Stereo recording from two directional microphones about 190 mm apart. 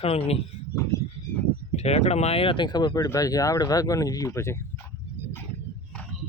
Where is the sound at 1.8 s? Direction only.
35° left (ahead or behind); by 4.9 s 15° left (ahead or behind).